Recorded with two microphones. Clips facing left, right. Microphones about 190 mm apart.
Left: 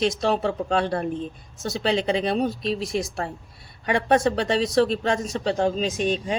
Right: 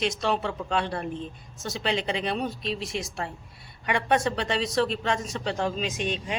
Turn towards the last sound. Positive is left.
turn(degrees=35)  # may be behind; listen again after turning